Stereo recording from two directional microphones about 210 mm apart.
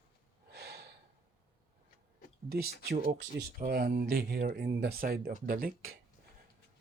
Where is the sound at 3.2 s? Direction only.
50° right (ahead or behind).